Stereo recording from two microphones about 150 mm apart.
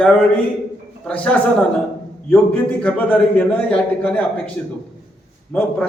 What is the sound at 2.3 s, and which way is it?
A man's voice, 10° left (ahead or behind).